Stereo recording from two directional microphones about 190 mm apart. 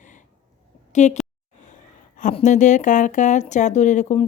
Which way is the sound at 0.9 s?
40° left (ahead or behind).